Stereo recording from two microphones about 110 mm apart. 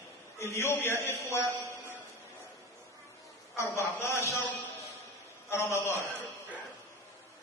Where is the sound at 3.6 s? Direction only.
25° left (ahead or behind).